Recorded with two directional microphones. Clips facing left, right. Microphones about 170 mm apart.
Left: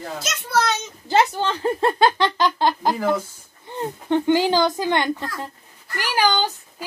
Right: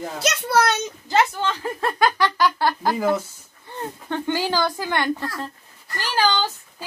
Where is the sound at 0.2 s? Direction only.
65° right (ahead or behind).